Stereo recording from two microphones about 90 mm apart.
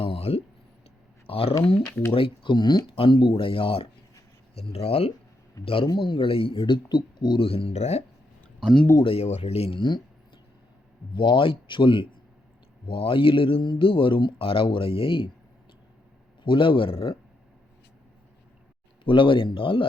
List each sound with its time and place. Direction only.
0.0 s a sound: 90° left
1.3 s speech: 90° left
1.9 s speech: 30° left (ahead or behind)
2.1 s speech: 80° left; by 2.9 s 55° left (ahead or behind)
2.9 s speech: 75° left (ahead or behind); by 5.9 s 90° left
5.9 s speech: 65° left (ahead or behind); by 6.7 s 85° left
6.8 s speech: 55° left (ahead or behind)
7.3 s speech: 90° left
8.6 s speech: 5° left (ahead or behind)
9.0 s speech: 90° left; by 10.0 s 60° left (ahead or behind)
11.1 s speech: 60° left (ahead or behind); by 15.3 s 80° left
16.4 s speech: 70° left (ahead or behind)
19.0 s speech: 70° left (ahead or behind)